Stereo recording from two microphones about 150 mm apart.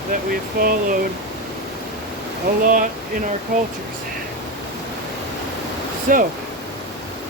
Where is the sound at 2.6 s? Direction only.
65° right (ahead or behind).